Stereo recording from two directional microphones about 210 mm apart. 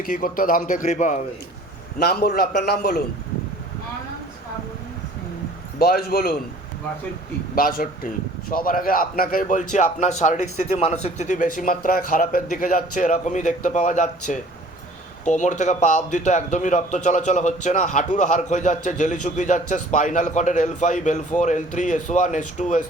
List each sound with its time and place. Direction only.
0.0 s speech: 40° left (ahead or behind)
2.0 s a man's voice: 50° left (ahead or behind)
5.8 s a man's voice: 45° left (ahead or behind)
7.5 s a man's voice: 40° left (ahead or behind)